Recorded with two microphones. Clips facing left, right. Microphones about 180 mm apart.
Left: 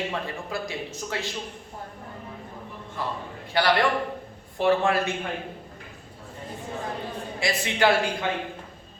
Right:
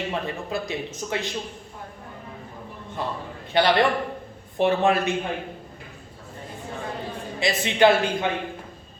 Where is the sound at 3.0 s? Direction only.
20° right (ahead or behind).